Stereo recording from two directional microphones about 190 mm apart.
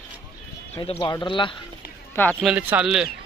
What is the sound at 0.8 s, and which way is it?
Speech, 25° left (ahead or behind).